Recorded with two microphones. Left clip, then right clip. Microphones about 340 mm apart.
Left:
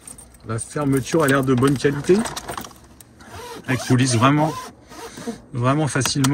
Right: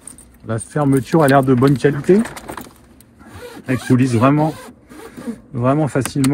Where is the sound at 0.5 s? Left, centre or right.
Centre.